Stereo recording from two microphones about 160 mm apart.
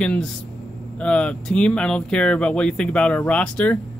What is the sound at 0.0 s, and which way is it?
Speech, 5° left (ahead or behind).